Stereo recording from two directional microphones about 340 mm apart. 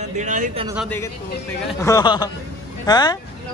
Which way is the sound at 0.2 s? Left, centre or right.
Right.